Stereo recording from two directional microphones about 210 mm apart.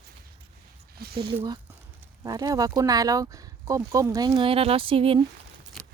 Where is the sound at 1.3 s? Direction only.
20° right (ahead or behind).